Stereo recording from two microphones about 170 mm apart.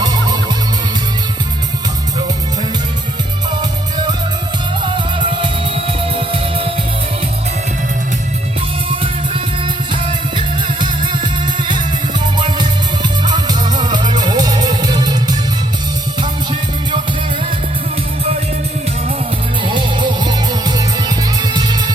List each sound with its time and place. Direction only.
0.0 s music: 25° right (ahead or behind)
3.6 s music: 25° right (ahead or behind)
5.4 s music: 35° right (ahead or behind)
9.9 s music: 30° right (ahead or behind)
12.4 s music: 25° right (ahead or behind)
19.6 s music: 30° right (ahead or behind)